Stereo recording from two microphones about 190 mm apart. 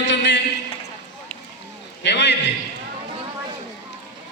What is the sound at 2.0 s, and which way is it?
Speech, 65° left (ahead or behind).